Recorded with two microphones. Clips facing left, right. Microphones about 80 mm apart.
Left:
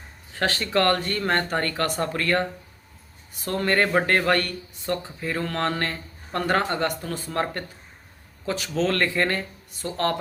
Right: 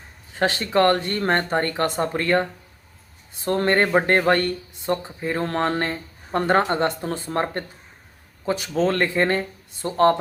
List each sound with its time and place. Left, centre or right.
0.3 s speech: right
3.7 s speech: right
8.4 s speech: right